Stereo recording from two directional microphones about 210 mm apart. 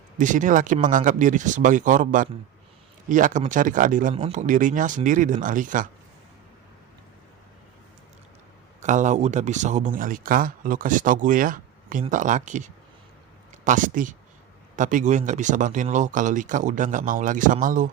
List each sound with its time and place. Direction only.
0.2 s speech: 35° right (ahead or behind)
8.8 s speech: 35° right (ahead or behind)